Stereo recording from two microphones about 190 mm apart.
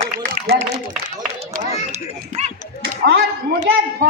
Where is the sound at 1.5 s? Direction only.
40° right (ahead or behind).